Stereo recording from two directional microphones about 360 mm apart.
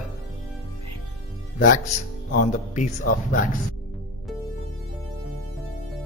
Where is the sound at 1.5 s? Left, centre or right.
Left.